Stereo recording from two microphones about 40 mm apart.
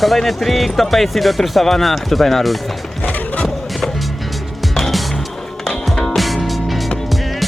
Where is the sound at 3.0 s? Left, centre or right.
Left.